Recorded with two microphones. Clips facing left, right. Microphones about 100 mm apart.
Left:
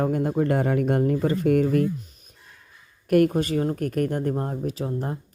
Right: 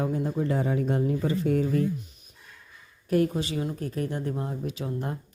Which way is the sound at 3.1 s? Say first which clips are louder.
Left 5 dB; 60° left (ahead or behind).